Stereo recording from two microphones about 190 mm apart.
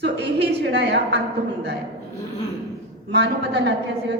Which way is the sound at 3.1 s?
65° right (ahead or behind).